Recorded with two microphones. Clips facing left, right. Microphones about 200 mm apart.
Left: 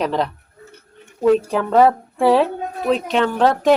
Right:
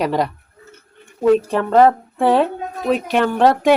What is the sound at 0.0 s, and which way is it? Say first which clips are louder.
Speech: right 1 dB; 5° right (ahead or behind).